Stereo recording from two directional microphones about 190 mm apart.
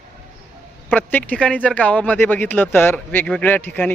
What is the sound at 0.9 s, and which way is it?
Speech, 10° left (ahead or behind).